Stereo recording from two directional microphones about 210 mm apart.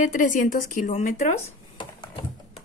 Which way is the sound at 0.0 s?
40° left (ahead or behind).